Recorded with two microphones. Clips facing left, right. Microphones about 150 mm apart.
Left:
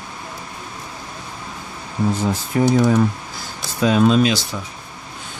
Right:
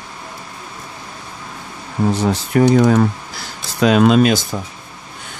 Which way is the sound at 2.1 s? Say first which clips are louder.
Right 6 dB; 80° right.